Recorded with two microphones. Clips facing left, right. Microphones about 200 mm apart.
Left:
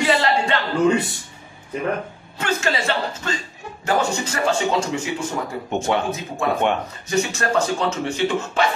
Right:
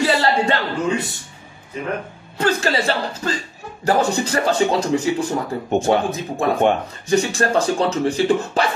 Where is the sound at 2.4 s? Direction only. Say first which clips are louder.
Right 3 dB; 35° right (ahead or behind).